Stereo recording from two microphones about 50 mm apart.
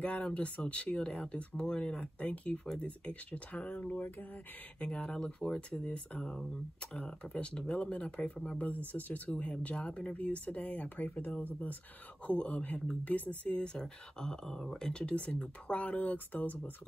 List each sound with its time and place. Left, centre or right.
0.2 s speech: left
4.7 s speech: left
8.6 s speech: left
9.3 s speech: left
12.3 s speech: left